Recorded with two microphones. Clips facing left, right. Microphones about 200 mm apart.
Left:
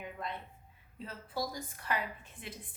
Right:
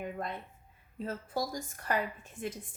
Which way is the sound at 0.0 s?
45° right (ahead or behind).